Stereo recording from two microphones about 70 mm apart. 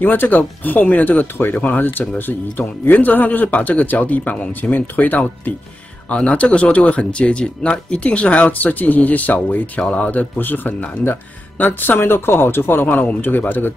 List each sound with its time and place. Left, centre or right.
0.0 s speech: left